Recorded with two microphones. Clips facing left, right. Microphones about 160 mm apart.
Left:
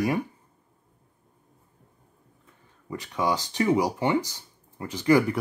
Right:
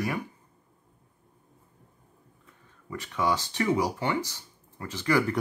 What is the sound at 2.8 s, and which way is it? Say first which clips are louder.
Speech: left 1 dB; 15° left (ahead or behind).